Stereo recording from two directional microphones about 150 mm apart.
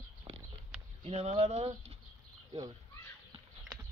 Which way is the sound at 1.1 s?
45° right (ahead or behind).